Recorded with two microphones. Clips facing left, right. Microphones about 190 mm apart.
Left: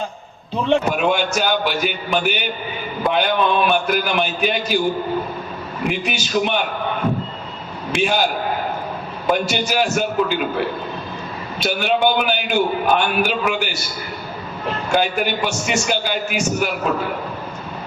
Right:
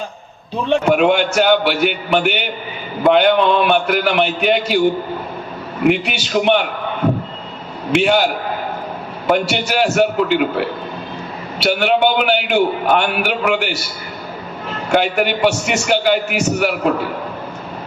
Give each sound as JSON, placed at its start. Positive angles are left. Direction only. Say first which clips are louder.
{"t": 0.9, "sound": "a man's voice", "louder": "right 5 dB", "side_deg": -65}
{"t": 5.8, "sound": "a man's voice", "louder": "right 8 dB", "side_deg": -65}
{"t": 7.9, "sound": "a man's voice", "louder": "right 5 dB", "side_deg": -65}
{"t": 9.3, "sound": "a man's voice", "louder": "right 3 dB", "side_deg": -65}
{"t": 11.6, "sound": "a man's voice", "louder": "right 3 dB", "side_deg": -65}
{"t": 14.9, "sound": "a man's voice", "louder": "right 4 dB", "side_deg": -65}